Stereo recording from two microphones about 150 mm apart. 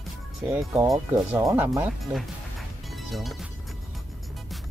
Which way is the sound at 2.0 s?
Centre (ahead or behind).